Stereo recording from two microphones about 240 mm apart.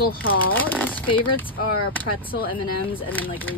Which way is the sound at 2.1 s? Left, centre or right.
Left.